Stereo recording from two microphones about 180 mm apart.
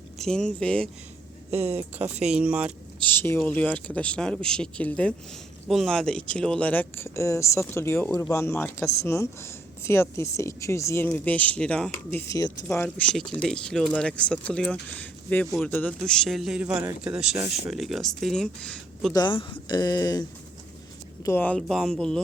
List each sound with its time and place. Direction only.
0.2 s a man's voice: 5° left (ahead or behind)
2.3 s speech: 5° right (ahead or behind)
3.0 s a man's voice: 10° left (ahead or behind)
19.1 s speech: 25° left (ahead or behind)
21.2 s a man's voice: 10° left (ahead or behind)